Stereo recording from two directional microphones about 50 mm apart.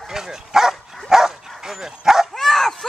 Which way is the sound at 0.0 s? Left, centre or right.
Centre.